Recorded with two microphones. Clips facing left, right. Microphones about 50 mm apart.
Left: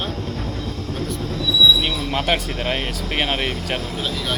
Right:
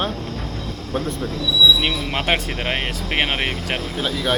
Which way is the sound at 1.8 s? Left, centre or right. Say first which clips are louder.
Even; right.